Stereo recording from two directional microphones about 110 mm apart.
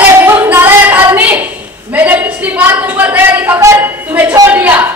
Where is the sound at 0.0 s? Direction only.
20° right (ahead or behind).